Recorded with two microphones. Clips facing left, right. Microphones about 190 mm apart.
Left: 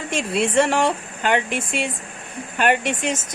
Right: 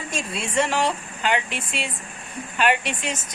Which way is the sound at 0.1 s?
65° left (ahead or behind).